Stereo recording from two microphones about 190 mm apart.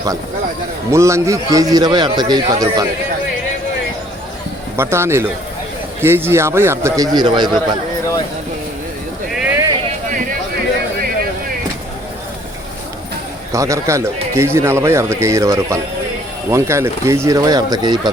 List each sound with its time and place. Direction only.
0.9 s a man's voice: 15° right (ahead or behind)
4.8 s speech: 15° right (ahead or behind)
9.3 s a sound: 5° right (ahead or behind)
13.5 s speech: 15° right (ahead or behind)